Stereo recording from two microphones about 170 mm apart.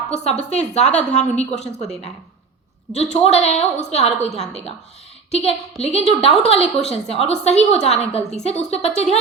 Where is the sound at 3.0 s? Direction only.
40° left (ahead or behind).